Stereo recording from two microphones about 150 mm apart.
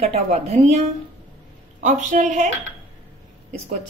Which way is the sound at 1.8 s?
55° right (ahead or behind).